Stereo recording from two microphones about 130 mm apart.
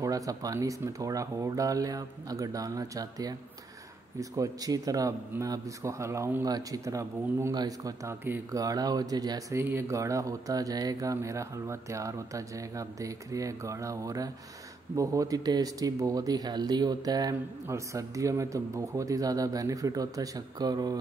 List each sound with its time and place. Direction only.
0.0 s speech: 25° right (ahead or behind)